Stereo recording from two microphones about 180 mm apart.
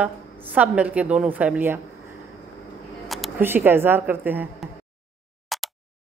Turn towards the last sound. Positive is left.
turn(degrees=0)  # may be behind; listen again after turning